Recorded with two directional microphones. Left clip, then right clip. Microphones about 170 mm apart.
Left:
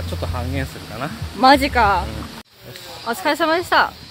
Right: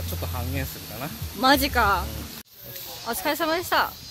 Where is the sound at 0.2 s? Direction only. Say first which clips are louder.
Left 6 dB; 5° left (ahead or behind).